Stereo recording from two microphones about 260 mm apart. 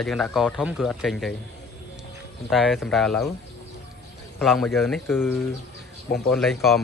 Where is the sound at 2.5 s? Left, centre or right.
Centre.